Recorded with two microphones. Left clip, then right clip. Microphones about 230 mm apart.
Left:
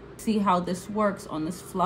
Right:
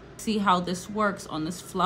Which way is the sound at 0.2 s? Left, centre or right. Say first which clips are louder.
Right 1 dB; centre.